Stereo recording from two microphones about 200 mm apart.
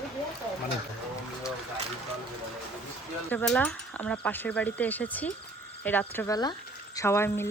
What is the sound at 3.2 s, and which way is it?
A woman's voice, 5° left (ahead or behind).